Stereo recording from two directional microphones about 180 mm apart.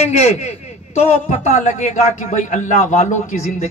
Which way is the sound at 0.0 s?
40° left (ahead or behind).